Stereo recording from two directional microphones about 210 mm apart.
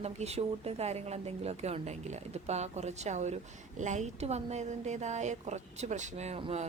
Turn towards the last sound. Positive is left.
turn(degrees=-30)  # may be behind; listen again after turning